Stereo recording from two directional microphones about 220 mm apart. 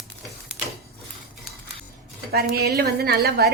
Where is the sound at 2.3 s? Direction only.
45° right (ahead or behind).